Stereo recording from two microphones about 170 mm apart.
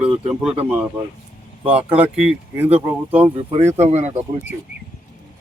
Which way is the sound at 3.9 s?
40° right (ahead or behind).